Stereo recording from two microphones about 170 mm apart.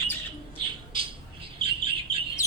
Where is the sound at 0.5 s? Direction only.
30° right (ahead or behind).